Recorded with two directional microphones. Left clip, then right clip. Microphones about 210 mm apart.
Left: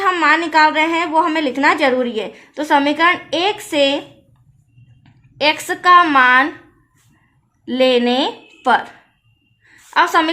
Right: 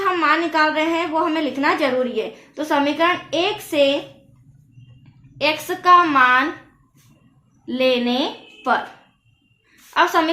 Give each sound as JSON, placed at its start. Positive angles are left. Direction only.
{"t": 0.0, "sound": "a woman's voice", "side_deg": 50}
{"t": 5.4, "sound": "a woman's voice", "side_deg": 50}
{"t": 7.6, "sound": "a woman's voice", "side_deg": 50}
{"t": 9.9, "sound": "a woman's voice", "side_deg": 50}